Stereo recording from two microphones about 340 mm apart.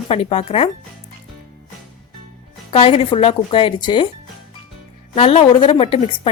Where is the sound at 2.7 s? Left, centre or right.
Centre.